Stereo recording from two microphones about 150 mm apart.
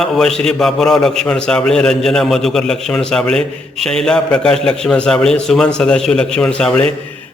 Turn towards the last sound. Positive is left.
turn(degrees=10)  # may be behind; listen again after turning